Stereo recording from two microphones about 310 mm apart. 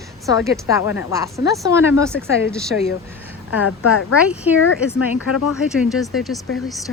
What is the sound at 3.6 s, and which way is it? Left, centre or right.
Speech, left.